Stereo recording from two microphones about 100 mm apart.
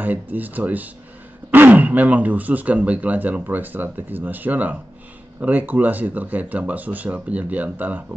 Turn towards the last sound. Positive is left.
turn(degrees=-15)  # may be behind; listen again after turning